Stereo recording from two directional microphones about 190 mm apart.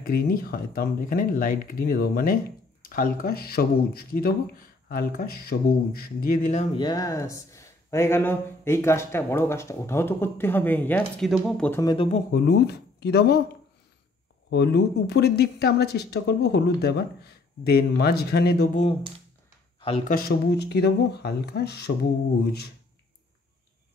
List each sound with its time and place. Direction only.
0.0 s speech: 50° left (ahead or behind)
6.7 s speech: 25° left (ahead or behind); by 11.8 s 5° left (ahead or behind)
11.8 s speech: 25° left (ahead or behind)
12.4 s speech: 60° left (ahead or behind)
14.5 s speech: 60° left (ahead or behind)
20.1 s speech: 55° left (ahead or behind)